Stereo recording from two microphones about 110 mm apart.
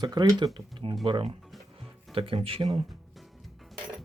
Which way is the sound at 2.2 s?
55° right (ahead or behind).